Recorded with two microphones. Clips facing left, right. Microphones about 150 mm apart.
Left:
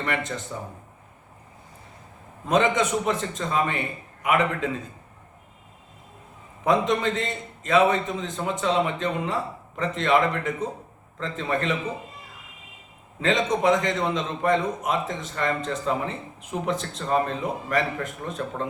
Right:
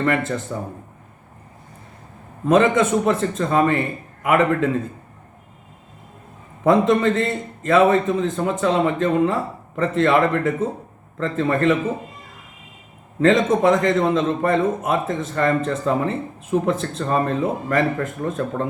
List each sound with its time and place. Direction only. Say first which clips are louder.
0.0 s a man's voice: right 8 dB; 50° right (ahead or behind)
2.9 s a man's voice: right 6 dB; 50° right (ahead or behind)
6.7 s a man's voice: right 7 dB; 50° right (ahead or behind)
13.1 s a man's voice: right 7 dB; 50° right (ahead or behind)